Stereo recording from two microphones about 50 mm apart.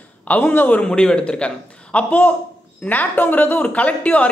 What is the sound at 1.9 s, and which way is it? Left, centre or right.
Speech, left.